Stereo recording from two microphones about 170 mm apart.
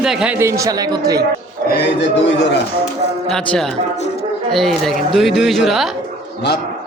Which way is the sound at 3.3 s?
5° left (ahead or behind).